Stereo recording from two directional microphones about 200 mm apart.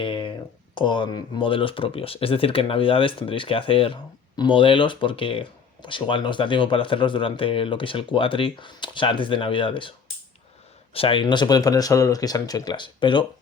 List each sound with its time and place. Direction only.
0.0 s a sound: 25° left (ahead or behind)
0.8 s speech: 25° left (ahead or behind)
10.9 s speech: 25° left (ahead or behind)